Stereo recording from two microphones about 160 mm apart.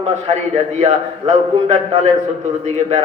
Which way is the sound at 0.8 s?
45° right (ahead or behind).